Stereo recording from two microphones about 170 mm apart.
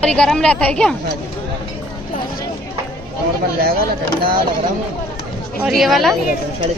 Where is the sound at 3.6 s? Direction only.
65° right (ahead or behind).